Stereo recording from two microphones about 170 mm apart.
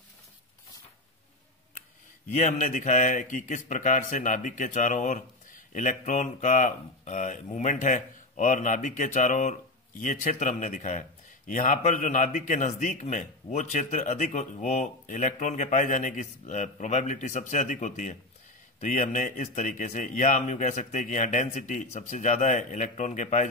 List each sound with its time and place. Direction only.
2.3 s a man's voice: 50° left (ahead or behind)